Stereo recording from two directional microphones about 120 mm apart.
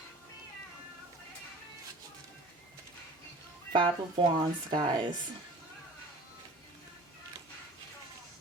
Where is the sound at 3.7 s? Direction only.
40° right (ahead or behind).